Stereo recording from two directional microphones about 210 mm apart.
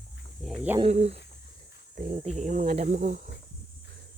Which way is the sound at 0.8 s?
30° right (ahead or behind).